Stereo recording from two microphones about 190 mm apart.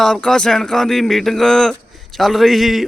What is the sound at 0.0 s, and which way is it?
A man's voice, 5° left (ahead or behind).